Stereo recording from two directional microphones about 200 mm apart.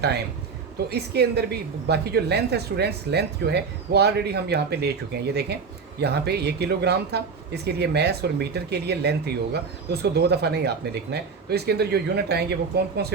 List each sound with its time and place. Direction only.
0.9 s a woman's voice: 55° right (ahead or behind)